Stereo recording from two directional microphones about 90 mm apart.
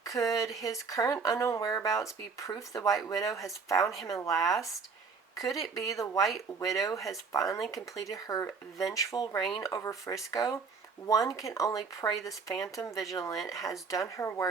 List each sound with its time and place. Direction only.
0.0 s speech: 35° left (ahead or behind)
5.7 s speech: 35° left (ahead or behind)